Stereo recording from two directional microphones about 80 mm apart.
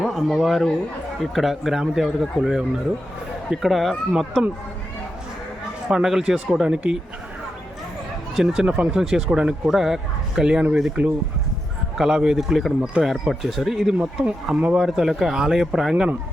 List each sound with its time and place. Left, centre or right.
0.0 s speech: centre
5.9 s speech: centre
8.4 s speech: centre
8.6 s speech: centre
8.9 s speech: centre